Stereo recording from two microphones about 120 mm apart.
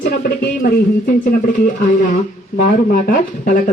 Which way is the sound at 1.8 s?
90° left.